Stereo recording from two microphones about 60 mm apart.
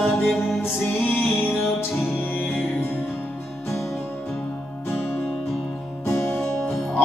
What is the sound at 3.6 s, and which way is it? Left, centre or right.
Music, left.